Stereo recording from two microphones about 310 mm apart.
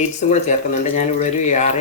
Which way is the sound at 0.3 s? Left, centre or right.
Left.